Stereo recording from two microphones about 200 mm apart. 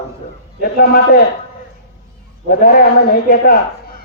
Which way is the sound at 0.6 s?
45° left (ahead or behind).